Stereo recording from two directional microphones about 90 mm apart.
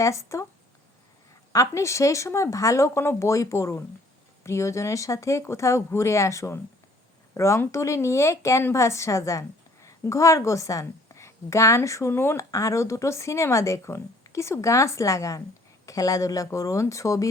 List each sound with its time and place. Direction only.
0.0 s a woman's voice: 35° left (ahead or behind)
1.5 s a woman's voice: 35° left (ahead or behind)